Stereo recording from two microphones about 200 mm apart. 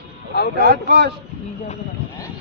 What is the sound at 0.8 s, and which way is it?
Speech, 55° right (ahead or behind).